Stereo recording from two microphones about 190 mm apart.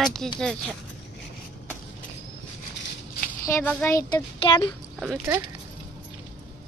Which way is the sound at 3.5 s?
10° left (ahead or behind).